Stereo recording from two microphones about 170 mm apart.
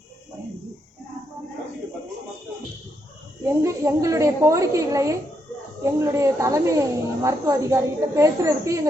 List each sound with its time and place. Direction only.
3.4 s speech: 15° right (ahead or behind)